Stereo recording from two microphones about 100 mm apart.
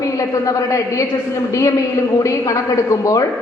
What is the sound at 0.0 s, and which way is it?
A man's voice, 35° left (ahead or behind).